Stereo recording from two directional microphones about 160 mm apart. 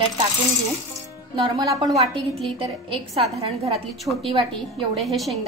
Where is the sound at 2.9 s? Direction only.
40° right (ahead or behind).